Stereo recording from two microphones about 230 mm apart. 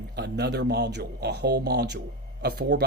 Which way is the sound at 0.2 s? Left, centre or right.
Right.